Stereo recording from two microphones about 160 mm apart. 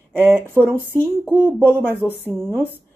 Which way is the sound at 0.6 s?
10° right (ahead or behind).